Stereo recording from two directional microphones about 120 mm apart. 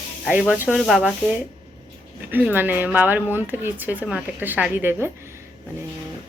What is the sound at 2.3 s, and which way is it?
Speech, 15° right (ahead or behind).